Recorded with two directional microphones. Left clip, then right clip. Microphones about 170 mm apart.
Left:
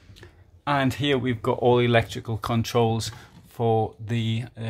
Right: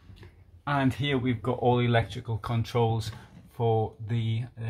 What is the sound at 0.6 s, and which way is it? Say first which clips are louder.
Speech: left 5 dB; 25° left (ahead or behind).